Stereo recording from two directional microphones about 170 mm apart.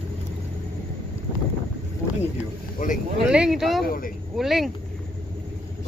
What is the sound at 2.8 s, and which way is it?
Speech, 55° left (ahead or behind).